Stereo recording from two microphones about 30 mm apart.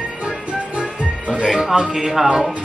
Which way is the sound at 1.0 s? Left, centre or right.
Right.